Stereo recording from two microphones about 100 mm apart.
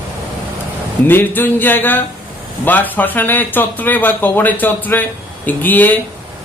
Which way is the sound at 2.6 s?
20° left (ahead or behind).